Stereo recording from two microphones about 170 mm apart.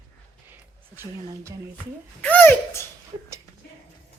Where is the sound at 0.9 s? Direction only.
15° right (ahead or behind).